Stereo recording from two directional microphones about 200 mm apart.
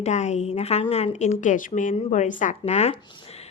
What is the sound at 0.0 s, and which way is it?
A woman's voice, 35° left (ahead or behind).